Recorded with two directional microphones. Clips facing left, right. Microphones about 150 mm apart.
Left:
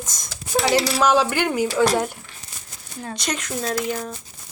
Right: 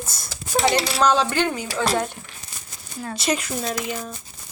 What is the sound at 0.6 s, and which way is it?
Speech, 5° left (ahead or behind).